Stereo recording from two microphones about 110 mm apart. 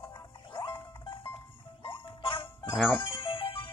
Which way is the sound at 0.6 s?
50° left (ahead or behind).